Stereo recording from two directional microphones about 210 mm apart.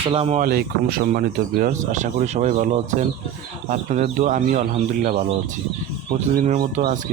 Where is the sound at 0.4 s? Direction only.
45° right (ahead or behind).